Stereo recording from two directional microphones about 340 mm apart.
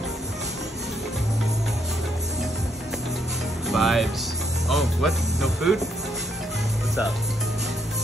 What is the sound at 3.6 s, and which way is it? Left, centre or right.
Speech, centre.